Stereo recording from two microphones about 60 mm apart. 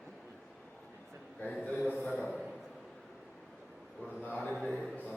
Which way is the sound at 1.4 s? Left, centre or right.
Left.